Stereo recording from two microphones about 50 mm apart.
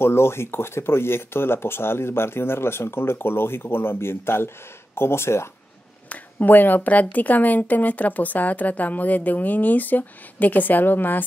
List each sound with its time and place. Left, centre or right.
0.0 s speech: left
6.0 s speech: left